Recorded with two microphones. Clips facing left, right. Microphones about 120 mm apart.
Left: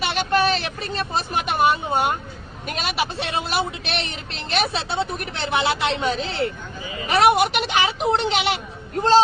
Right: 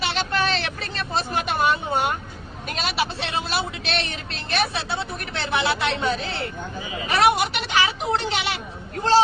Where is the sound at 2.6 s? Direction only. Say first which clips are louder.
Left 1 dB; 50° left (ahead or behind).